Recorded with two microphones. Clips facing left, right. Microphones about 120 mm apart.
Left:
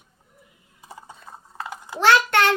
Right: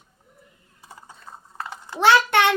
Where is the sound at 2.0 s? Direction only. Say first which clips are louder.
Right 1 dB; 15° right (ahead or behind).